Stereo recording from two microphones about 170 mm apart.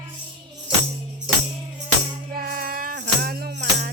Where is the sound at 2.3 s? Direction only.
60° right (ahead or behind).